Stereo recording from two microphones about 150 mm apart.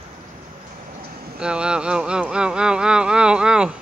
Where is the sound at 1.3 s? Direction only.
5° right (ahead or behind).